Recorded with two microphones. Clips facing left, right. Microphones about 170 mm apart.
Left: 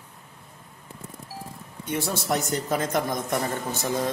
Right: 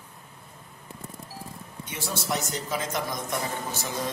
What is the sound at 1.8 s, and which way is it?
A man's voice, 55° left (ahead or behind).